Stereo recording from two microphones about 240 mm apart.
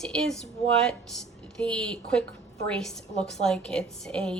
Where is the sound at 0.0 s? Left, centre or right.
Centre.